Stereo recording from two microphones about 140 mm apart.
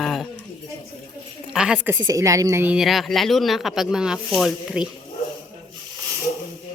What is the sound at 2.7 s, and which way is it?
Speech, centre (ahead or behind).